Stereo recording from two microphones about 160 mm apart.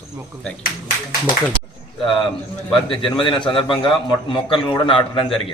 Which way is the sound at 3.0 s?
30° left (ahead or behind).